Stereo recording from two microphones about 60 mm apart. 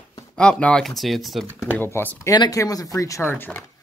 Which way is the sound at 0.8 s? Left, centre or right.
Centre.